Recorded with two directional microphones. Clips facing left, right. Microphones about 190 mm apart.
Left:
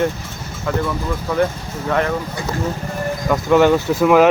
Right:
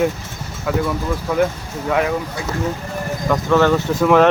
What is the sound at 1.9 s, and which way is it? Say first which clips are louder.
Speech: right 1 dB; 5° right (ahead or behind).